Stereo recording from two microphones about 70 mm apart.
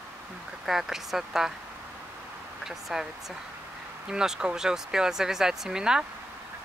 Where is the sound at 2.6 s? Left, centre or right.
Centre.